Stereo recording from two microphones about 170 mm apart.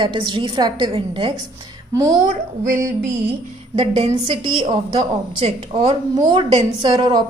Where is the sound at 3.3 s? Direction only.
35° right (ahead or behind).